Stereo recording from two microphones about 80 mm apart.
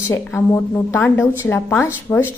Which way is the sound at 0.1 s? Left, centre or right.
Left.